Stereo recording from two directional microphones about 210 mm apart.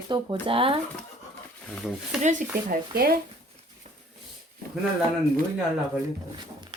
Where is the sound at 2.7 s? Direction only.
45° right (ahead or behind).